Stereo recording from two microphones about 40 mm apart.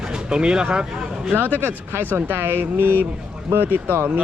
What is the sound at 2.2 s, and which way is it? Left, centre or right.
Speech, right.